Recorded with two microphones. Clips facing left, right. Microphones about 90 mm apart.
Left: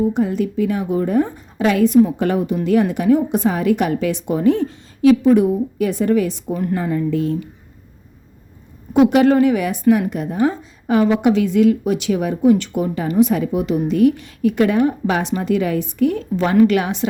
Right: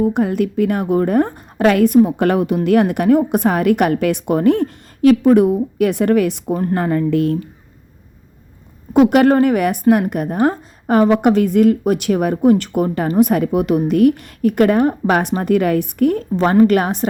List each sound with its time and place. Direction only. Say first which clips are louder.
0.0 s a woman's voice: right 2 dB; 60° right (ahead or behind)
6.5 s a woman's voice: right 3 dB; 40° right (ahead or behind)
6.7 s a woman's voice: right 4 dB; 60° right (ahead or behind)
8.9 s a woman's voice: right 1 dB; 50° right (ahead or behind)
16.4 s a woman's voice: right 2 dB; 40° right (ahead or behind)